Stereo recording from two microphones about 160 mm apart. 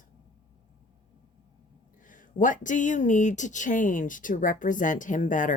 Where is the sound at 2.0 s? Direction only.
55° left (ahead or behind).